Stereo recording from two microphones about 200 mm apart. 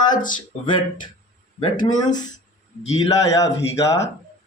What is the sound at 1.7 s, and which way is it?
Speech, 40° left (ahead or behind).